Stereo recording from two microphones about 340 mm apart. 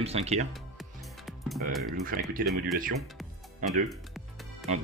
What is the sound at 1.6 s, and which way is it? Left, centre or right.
Speech, right.